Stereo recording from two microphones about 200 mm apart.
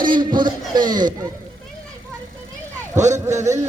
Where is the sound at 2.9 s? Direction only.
35° right (ahead or behind).